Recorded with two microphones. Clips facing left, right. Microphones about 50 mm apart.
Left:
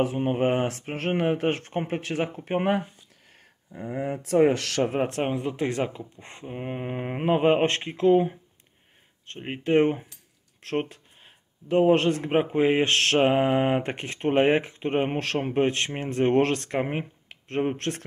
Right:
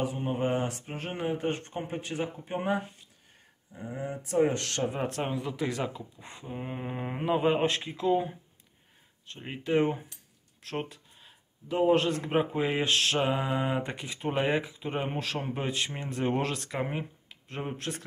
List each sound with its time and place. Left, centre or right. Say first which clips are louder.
0.0 s speech: left 6 dB; left
3.3 s speech: left 5 dB; left
4.9 s speech: left 6 dB; left
6.1 s mantra: left 2 dB; left
6.4 s speech: left 4 dB; left
9.4 s mantra: left 5 dB; left
10.6 s a sound: left 7 dB; left
11.8 s mantra: left 3 dB; left
16.8 s speech: left 4 dB; left